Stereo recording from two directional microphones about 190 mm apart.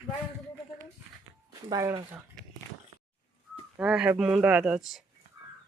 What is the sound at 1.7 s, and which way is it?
Speech, 15° right (ahead or behind).